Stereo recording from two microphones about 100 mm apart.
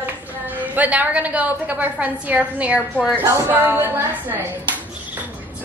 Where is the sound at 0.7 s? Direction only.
15° right (ahead or behind).